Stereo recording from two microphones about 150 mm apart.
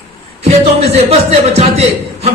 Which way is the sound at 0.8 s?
45° right (ahead or behind).